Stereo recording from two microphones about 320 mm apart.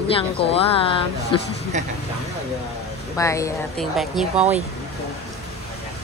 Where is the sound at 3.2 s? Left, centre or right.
Centre.